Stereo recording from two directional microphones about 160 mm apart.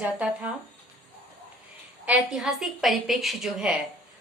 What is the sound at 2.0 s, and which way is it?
A woman's voice, 5° right (ahead or behind).